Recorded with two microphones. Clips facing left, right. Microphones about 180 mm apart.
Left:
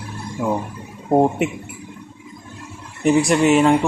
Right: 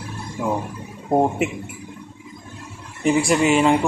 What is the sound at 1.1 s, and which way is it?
Speech, 5° left (ahead or behind).